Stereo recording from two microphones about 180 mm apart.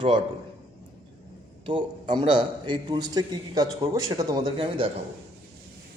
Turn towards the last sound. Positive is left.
turn(degrees=-30)  # may be behind; listen again after turning